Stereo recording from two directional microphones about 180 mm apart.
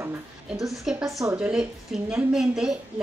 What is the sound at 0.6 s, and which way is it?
Speech, centre (ahead or behind).